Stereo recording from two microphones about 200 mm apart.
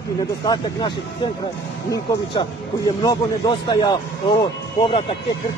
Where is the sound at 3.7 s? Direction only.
20° left (ahead or behind).